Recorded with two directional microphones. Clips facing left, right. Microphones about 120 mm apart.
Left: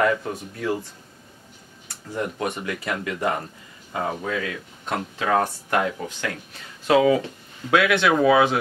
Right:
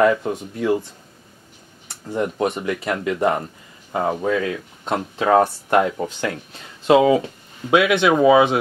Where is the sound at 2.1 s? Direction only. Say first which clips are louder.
Right 5 dB; 25° right (ahead or behind).